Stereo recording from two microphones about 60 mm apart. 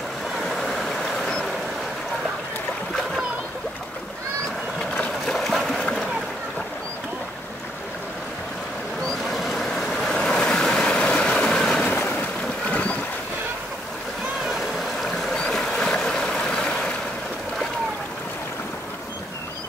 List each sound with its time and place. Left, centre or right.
0.4 s vehicle: centre
5.2 s water: centre
5.8 s splash: centre
9.3 s vehicle: centre
12.0 s boat: left
14.5 s boat: centre